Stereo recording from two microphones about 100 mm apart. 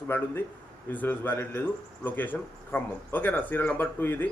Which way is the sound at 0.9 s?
20° left (ahead or behind).